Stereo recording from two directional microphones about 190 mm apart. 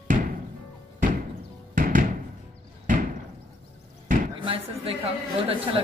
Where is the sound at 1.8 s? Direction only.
45° right (ahead or behind).